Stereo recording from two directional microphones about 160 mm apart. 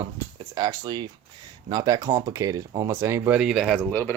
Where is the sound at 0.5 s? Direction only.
25° right (ahead or behind).